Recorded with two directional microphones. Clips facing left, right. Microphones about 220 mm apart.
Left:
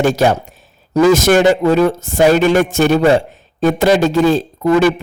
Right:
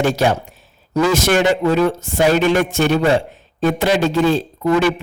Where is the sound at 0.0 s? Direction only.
45° left (ahead or behind).